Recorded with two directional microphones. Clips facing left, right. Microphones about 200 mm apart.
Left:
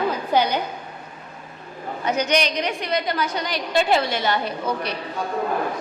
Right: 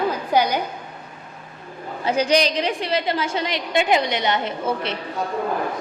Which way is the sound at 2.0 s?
30° right (ahead or behind).